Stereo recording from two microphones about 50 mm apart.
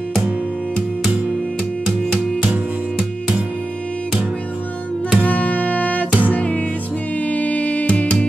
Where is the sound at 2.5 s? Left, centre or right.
Right.